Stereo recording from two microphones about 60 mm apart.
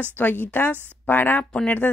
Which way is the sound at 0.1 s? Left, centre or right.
Left.